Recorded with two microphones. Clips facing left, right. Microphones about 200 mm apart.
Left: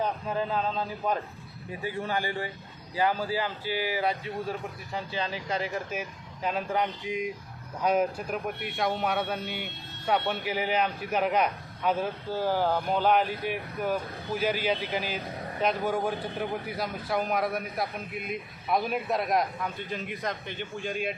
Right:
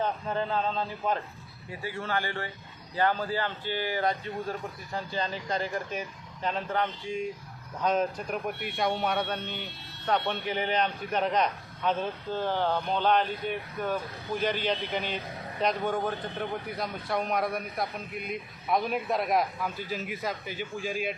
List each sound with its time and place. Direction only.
0.0 s a man's voice: 10° left (ahead or behind)
8.4 s a man's voice: centre (ahead or behind)